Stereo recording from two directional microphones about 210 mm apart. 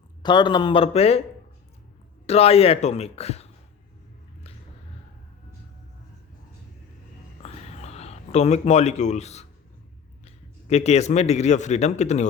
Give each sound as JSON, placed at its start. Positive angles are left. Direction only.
{"t": 0.2, "sound": "speech", "side_deg": 20}
{"t": 2.2, "sound": "speech", "side_deg": 30}
{"t": 7.4, "sound": "a sound", "side_deg": 30}
{"t": 10.2, "sound": "speech", "side_deg": 30}